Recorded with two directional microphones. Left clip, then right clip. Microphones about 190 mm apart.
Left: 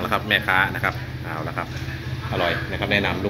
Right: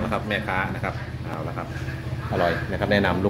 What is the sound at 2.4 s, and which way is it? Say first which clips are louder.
Speech: even; 30° right (ahead or behind).